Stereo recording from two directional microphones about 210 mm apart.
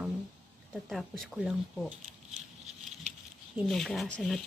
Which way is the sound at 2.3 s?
30° right (ahead or behind).